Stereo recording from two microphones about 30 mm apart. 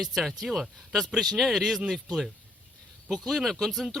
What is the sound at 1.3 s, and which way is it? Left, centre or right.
Speech, centre.